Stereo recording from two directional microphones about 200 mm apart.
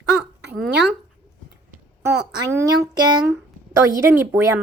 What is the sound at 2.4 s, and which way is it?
Speech, 15° right (ahead or behind).